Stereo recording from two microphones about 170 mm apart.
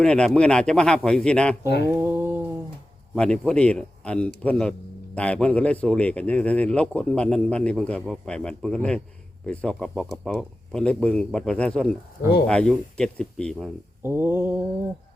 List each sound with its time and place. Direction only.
0.0 s speech: 5° left (ahead or behind)
1.6 s mantra: 80° left
2.0 s a sound: 15° right (ahead or behind)
3.2 s speech: 5° left (ahead or behind)
14.0 s mantra: 15° right (ahead or behind)